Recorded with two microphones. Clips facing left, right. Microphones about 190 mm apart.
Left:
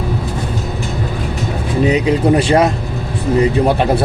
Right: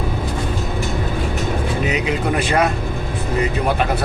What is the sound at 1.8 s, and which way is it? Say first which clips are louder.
A man's voice: left 11 dB; 35° left (ahead or behind).